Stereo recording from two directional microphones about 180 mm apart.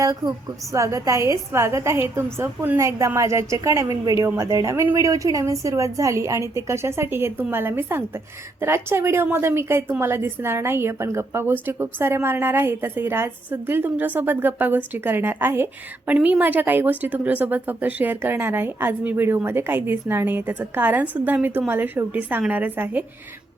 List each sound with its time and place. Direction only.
0.0 s a woman's voice: 20° right (ahead or behind)